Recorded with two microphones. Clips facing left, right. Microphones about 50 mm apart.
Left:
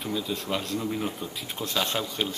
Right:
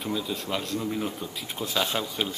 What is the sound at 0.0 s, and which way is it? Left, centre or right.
Speech, centre.